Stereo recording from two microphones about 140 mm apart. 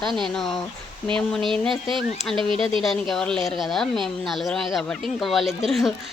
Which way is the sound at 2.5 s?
40° right (ahead or behind).